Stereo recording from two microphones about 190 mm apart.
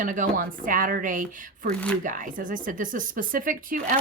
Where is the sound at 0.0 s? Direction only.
45° right (ahead or behind).